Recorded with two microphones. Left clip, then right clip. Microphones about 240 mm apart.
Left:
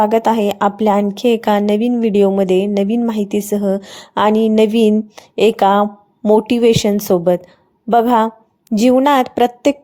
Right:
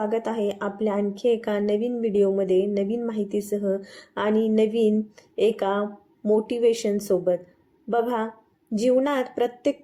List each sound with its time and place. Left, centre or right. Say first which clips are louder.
0.0 s speech: left 12 dB; left